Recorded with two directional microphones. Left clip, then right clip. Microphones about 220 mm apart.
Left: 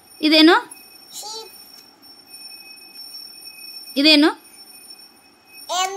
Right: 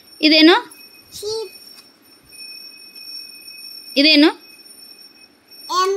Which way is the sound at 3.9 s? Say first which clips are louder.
Right 2 dB; 5° left (ahead or behind).